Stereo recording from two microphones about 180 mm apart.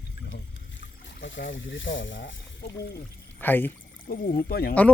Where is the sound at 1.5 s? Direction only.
90° left.